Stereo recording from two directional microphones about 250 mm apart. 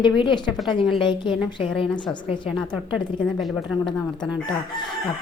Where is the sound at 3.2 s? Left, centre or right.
Centre.